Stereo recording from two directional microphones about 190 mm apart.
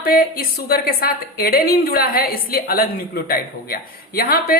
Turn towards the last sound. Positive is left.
turn(degrees=50)  # may be behind; listen again after turning